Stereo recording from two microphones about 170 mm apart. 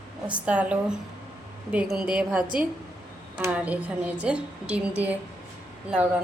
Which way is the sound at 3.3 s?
10° right (ahead or behind).